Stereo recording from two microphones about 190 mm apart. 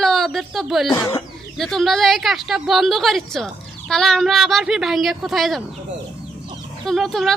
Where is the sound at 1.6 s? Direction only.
Centre (ahead or behind).